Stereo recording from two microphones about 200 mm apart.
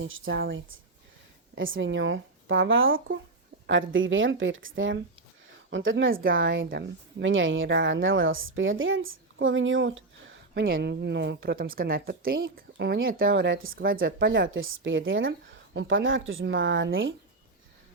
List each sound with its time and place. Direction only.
0.0 s speech: 70° right (ahead or behind)
1.5 s speech: 75° right (ahead or behind)
6.7 s speech: 60° right (ahead or behind)
10.5 s speech: 50° right (ahead or behind)
12.7 s speech: 65° right (ahead or behind); by 13.3 s 45° right (ahead or behind)
13.3 s speech: 70° right (ahead or behind)
13.7 s speech: 45° right (ahead or behind)
14.2 s speech: 65° right (ahead or behind)